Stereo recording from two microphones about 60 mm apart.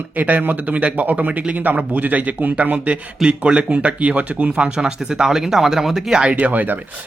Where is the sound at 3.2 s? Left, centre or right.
Centre.